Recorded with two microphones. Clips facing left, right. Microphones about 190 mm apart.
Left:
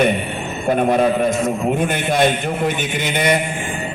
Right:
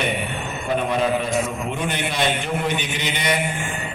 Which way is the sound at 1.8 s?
50° left (ahead or behind).